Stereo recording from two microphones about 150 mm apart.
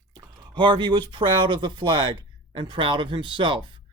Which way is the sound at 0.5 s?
30° right (ahead or behind).